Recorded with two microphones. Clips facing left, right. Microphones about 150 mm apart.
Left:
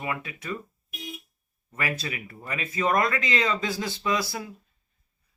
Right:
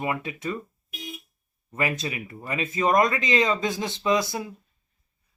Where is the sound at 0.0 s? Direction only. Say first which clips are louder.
Right 4 dB; 25° right (ahead or behind).